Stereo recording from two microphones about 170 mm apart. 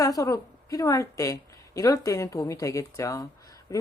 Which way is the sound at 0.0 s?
20° left (ahead or behind).